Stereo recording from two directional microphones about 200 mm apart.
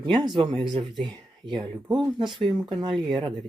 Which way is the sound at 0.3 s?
25° right (ahead or behind).